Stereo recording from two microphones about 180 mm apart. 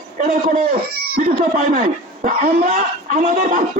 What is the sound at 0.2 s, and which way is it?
A man's voice, 45° right (ahead or behind).